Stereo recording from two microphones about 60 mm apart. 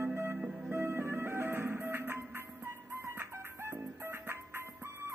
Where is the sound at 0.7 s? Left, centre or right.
Right.